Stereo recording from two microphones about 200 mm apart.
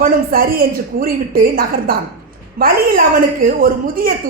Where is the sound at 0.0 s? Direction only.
45° right (ahead or behind).